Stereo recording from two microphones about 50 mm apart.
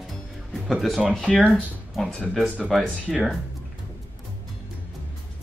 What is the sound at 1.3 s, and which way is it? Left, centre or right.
Speech, left.